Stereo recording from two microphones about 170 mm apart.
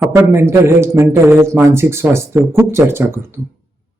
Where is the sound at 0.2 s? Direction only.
15° right (ahead or behind).